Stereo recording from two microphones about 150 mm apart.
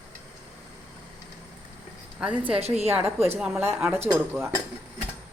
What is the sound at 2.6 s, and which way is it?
Speech, 45° right (ahead or behind).